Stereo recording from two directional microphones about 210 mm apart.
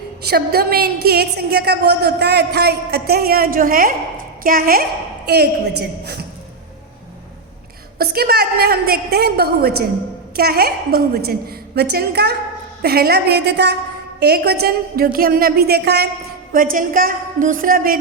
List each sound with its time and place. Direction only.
0.3 s a woman's voice: 45° right (ahead or behind)
7.9 s a woman's voice: 45° right (ahead or behind)